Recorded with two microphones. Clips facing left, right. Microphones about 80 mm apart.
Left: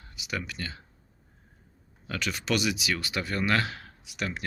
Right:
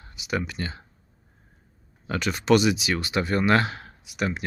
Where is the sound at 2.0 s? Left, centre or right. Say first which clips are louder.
Right 9 dB; right.